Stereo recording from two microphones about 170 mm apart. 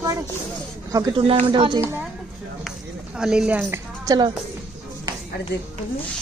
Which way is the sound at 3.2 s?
5° right (ahead or behind).